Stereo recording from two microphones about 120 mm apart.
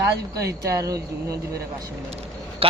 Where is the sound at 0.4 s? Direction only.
25° right (ahead or behind).